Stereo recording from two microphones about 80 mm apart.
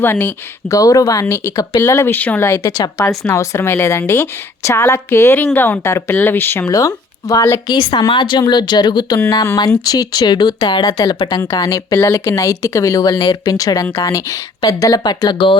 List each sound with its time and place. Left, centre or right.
0.0 s a woman's voice: left
0.7 s a woman's voice: left
2.1 s a woman's voice: centre
2.6 s speech: left
3.2 s a woman's voice: left
6.7 s speech: left
7.7 s speech: left
9.3 s speech: left
11.9 s speech: left